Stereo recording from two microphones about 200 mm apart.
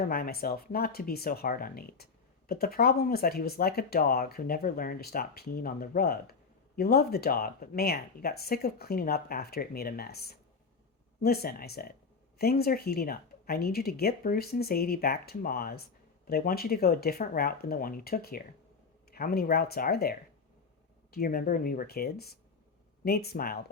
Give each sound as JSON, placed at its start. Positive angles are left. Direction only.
{"t": 0.0, "sound": "speech", "side_deg": 50}